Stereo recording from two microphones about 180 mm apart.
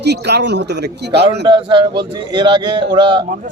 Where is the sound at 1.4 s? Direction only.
25° right (ahead or behind).